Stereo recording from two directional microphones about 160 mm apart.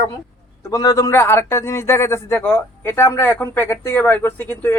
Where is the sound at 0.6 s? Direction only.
20° left (ahead or behind).